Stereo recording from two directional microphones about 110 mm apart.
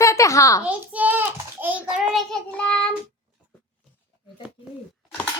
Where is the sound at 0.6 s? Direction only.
15° right (ahead or behind).